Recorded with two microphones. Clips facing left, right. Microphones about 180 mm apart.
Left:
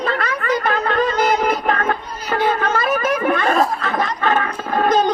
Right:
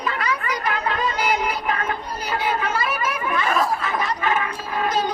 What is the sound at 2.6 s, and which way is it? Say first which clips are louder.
Chatter: left 6 dB; 65° left (ahead or behind).